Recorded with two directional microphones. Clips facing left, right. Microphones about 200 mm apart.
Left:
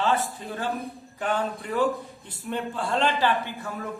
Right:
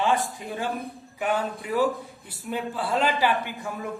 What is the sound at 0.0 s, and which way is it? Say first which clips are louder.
A man's voice: right 1 dB; 15° right (ahead or behind).